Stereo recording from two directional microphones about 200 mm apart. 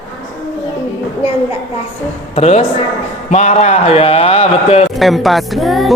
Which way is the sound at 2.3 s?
35° left (ahead or behind).